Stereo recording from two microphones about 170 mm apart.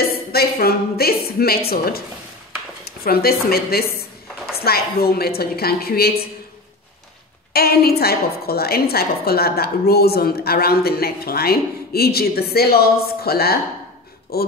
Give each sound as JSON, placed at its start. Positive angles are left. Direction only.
{"t": 0.3, "sound": "a woman's voice", "side_deg": 65}
{"t": 7.5, "sound": "a woman's voice", "side_deg": 65}